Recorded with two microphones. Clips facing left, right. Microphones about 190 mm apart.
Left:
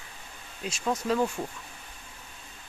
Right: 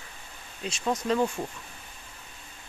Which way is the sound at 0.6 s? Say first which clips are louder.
Right 1 dB; 5° left (ahead or behind).